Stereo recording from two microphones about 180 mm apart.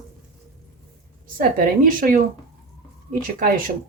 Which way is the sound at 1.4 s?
50° right (ahead or behind).